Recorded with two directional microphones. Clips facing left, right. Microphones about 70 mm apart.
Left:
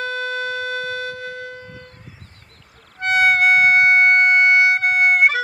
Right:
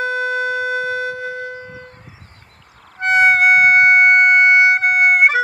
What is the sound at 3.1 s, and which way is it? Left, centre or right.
Music, centre.